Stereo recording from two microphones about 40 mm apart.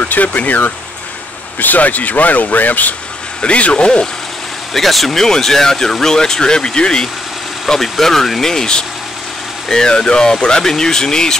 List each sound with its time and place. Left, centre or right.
0.0 s speech: left
3.4 s speech: left
4.7 s speech: centre
7.6 s speech: centre